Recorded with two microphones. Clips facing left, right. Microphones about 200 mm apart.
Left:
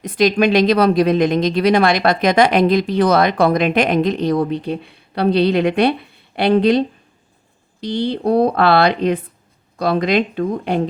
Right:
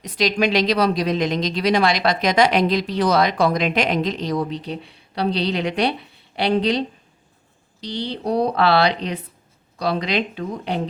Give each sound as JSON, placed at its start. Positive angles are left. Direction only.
{"t": 0.0, "sound": "speech", "side_deg": 55}